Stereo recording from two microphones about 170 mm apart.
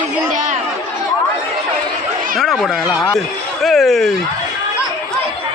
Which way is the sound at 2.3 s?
Centre (ahead or behind).